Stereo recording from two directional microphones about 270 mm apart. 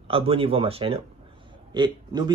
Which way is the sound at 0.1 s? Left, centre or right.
Right.